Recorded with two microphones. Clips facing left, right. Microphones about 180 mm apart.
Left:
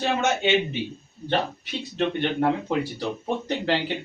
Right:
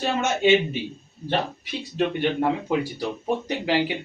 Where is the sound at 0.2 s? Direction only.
10° right (ahead or behind).